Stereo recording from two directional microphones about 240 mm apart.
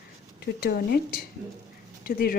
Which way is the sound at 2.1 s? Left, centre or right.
Left.